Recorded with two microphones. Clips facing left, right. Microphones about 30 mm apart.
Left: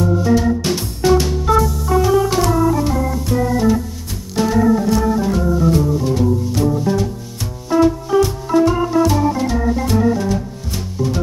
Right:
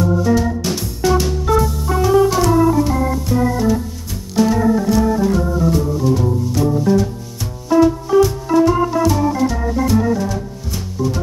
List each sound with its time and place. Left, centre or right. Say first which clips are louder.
0.0 s organ: even; centre
0.6 s music: left 1 dB; left
1.1 s music: left 2 dB; centre
2.4 s organ: right 2 dB; centre
4.4 s organ: even; centre
5.7 s music: even; centre
7.7 s organ: right 2 dB; centre